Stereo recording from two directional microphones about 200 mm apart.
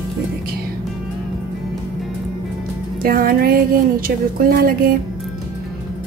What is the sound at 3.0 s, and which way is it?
A woman's voice, 45° right (ahead or behind).